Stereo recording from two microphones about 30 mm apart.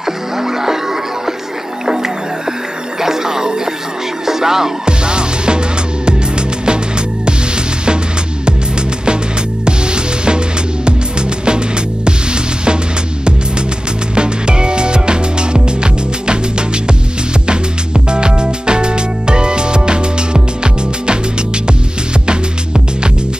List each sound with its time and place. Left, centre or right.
0.0 s music: centre
3.0 s music: centre
4.8 s music: right
9.7 s music: right
11.4 s music: right
14.1 s music: right